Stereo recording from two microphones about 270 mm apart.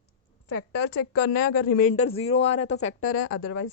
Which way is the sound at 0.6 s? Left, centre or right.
Left.